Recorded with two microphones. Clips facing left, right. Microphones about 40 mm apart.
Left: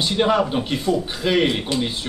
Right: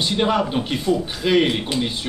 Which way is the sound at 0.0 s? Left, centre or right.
Centre.